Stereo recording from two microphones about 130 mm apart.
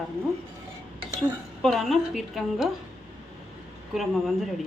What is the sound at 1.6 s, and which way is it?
Speech, centre (ahead or behind).